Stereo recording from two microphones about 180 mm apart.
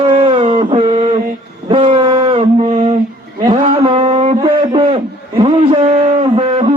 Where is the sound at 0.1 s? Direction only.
30° right (ahead or behind).